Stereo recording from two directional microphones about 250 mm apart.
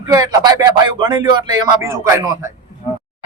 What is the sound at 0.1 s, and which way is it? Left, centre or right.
Speech, centre.